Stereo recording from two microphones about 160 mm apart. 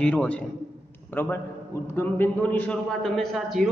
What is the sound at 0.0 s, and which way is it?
A man's voice, 5° left (ahead or behind).